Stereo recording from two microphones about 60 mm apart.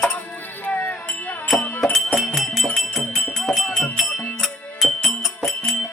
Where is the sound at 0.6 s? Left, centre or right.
Left.